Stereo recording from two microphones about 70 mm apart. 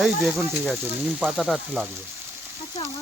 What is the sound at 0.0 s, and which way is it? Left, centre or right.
Speech, centre.